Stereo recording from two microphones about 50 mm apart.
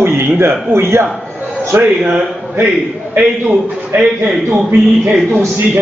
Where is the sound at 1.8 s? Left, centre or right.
Centre.